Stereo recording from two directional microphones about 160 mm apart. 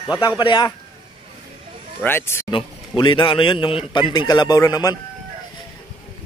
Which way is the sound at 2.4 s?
30° left (ahead or behind).